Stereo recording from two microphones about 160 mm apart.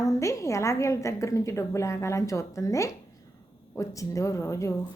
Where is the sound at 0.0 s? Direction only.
20° left (ahead or behind).